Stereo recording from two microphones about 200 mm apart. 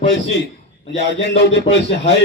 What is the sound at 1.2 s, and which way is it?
Speech, 60° left (ahead or behind).